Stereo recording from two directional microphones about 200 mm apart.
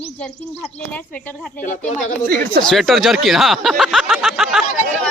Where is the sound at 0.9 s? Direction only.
5° left (ahead or behind).